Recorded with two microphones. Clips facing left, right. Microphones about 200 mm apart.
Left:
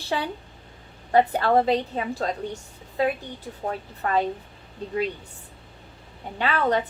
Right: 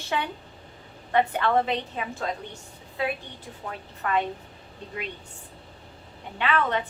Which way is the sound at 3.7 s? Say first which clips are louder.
Left 3 dB; 35° left (ahead or behind).